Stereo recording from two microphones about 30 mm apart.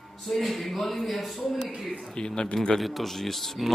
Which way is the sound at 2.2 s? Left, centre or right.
Left.